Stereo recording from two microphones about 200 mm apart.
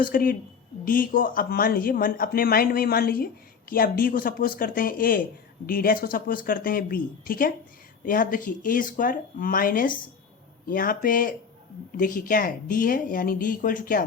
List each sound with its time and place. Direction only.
0.0 s speech: 45° left (ahead or behind)